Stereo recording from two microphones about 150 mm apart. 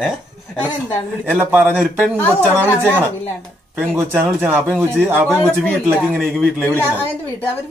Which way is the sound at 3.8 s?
Centre (ahead or behind).